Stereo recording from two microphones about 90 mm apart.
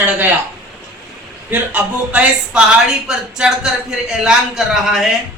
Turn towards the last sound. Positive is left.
turn(degrees=-5)  # may be behind; listen again after turning